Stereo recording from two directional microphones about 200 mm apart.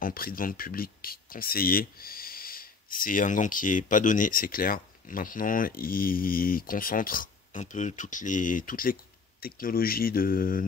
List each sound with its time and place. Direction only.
0.0 s speech: 45° left (ahead or behind)